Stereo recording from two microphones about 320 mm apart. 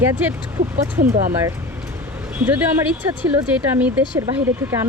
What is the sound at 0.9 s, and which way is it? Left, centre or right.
Speech, right.